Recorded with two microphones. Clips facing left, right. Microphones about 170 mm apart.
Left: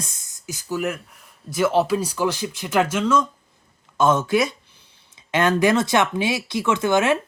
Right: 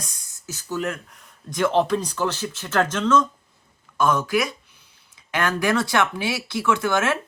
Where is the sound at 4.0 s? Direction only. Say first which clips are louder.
Left 3 dB; 25° left (ahead or behind).